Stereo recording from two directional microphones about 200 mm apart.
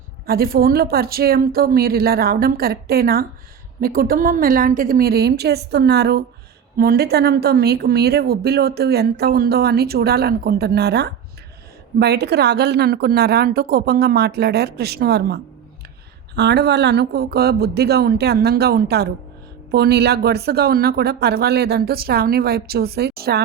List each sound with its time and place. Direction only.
0.3 s speech: 50° right (ahead or behind)